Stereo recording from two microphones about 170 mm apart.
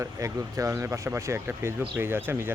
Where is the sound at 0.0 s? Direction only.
20° right (ahead or behind).